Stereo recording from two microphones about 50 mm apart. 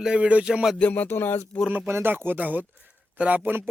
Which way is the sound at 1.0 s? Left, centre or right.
Left.